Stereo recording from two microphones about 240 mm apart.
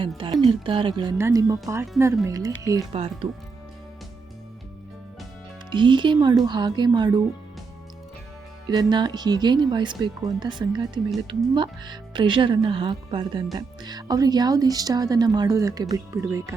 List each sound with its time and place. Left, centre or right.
0.4 s speech: right
5.7 s speech: centre
8.6 s speech: centre